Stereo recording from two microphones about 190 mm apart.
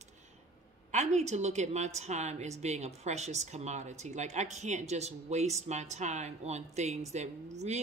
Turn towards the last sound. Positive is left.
turn(degrees=-35)  # may be behind; listen again after turning